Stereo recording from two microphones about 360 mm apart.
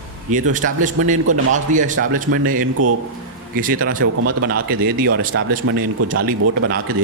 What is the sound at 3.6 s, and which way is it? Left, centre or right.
Speech, right.